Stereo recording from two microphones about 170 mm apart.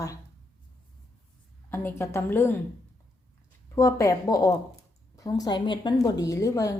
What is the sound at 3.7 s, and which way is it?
A woman's voice, 20° left (ahead or behind).